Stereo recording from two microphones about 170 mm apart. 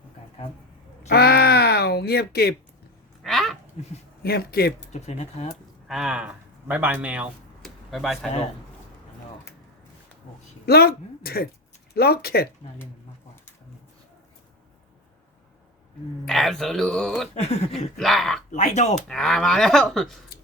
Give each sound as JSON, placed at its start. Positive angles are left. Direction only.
{"t": 1.1, "sound": "a sound", "side_deg": 70}
{"t": 3.2, "sound": "a sound", "side_deg": 0}
{"t": 4.2, "sound": "speech", "side_deg": 65}
{"t": 4.9, "sound": "speech", "side_deg": 40}
{"t": 5.9, "sound": "speech", "side_deg": -5}
{"t": 10.7, "sound": "speech", "side_deg": 65}
{"t": 16.2, "sound": "speech", "side_deg": 0}
{"t": 17.3, "sound": "speech", "side_deg": 40}
{"t": 17.7, "sound": "speech", "side_deg": 0}
{"t": 18.5, "sound": "speech", "side_deg": 45}
{"t": 19.0, "sound": "speech", "side_deg": 0}